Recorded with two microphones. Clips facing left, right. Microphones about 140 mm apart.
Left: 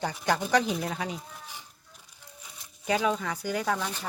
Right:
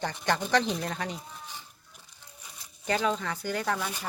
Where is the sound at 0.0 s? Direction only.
5° left (ahead or behind).